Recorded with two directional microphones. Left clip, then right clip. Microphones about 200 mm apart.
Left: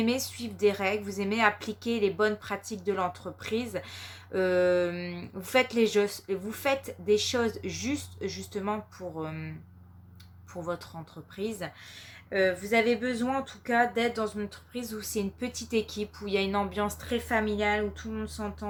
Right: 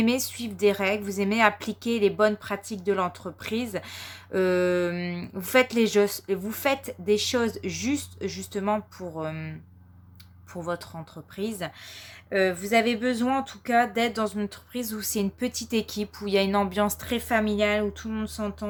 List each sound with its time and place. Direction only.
0.0 s a woman's voice: 35° right (ahead or behind)